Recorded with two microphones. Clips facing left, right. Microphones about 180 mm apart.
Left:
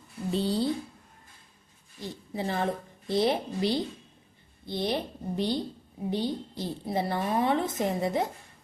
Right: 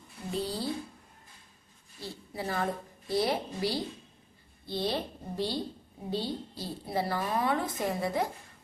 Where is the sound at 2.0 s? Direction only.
20° left (ahead or behind).